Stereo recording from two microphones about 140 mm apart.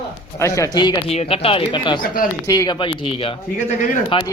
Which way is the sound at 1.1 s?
45° left (ahead or behind).